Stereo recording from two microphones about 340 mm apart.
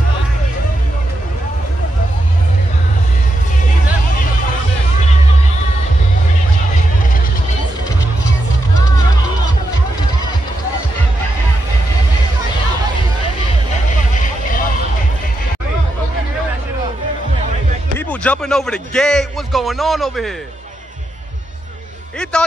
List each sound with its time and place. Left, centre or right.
14.2 s vehicle: left
17.9 s speech: centre